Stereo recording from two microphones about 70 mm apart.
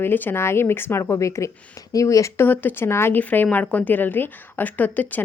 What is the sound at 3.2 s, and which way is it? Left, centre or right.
A woman's voice, left.